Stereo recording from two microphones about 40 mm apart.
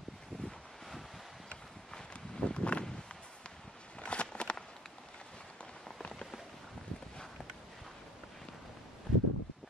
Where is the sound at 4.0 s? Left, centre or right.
Left.